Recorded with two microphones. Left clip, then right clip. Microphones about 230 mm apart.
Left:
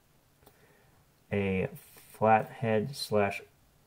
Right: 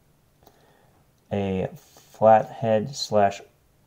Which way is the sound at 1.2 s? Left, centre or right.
Centre.